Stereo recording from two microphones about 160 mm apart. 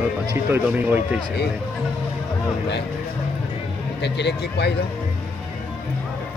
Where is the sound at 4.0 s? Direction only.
90° left.